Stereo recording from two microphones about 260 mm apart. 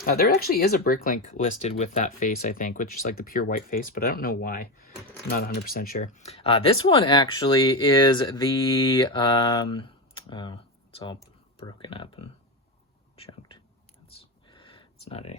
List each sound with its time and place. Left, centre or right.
0.0 s speech: left
13.1 s whispering: left
14.4 s a sound: centre